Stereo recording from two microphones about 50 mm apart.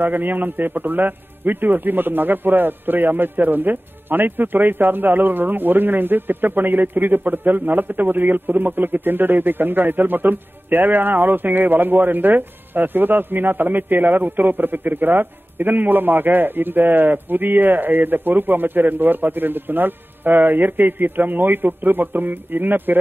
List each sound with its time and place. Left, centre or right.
0.0 s a man's voice: right